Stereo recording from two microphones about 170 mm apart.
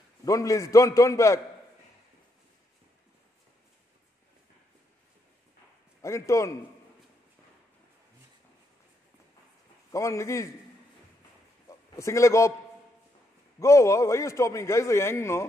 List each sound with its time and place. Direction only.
0.2 s a man's voice: 20° left (ahead or behind)
6.0 s a man's voice: 15° left (ahead or behind)
9.8 s a man's voice: 20° left (ahead or behind)
12.0 s a man's voice: 15° left (ahead or behind)
13.6 s a man's voice: 15° left (ahead or behind)